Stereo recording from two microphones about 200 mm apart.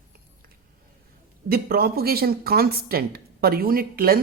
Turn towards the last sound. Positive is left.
turn(degrees=-45)  # may be behind; listen again after turning